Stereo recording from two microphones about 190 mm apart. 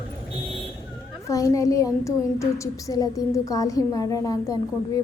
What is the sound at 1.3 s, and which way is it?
A woman's voice, 15° left (ahead or behind).